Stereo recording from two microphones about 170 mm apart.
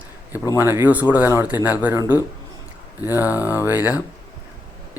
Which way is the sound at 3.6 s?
10° right (ahead or behind).